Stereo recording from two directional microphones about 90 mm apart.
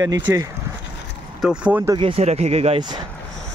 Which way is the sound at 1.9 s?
75° right (ahead or behind).